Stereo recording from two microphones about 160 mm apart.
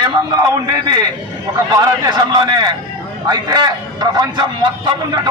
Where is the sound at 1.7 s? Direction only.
25° right (ahead or behind).